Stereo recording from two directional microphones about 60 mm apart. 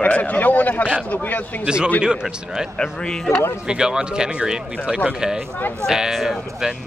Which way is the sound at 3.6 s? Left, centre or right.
Centre.